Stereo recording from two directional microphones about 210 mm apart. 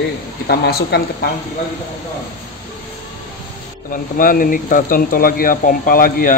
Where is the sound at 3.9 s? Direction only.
40° left (ahead or behind).